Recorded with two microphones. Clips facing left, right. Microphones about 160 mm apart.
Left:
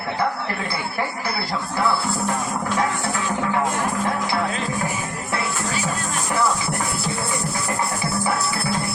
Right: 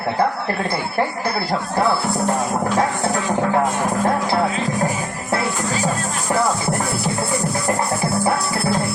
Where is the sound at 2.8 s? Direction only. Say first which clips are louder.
Right 3 dB; 40° right (ahead or behind).